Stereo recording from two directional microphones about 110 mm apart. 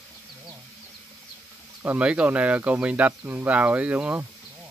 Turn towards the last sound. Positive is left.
turn(degrees=-10)  # may be behind; listen again after turning